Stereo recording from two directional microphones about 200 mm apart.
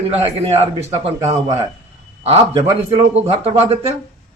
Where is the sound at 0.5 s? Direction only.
30° right (ahead or behind).